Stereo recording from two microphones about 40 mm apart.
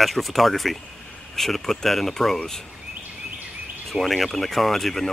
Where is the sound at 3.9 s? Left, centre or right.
Centre.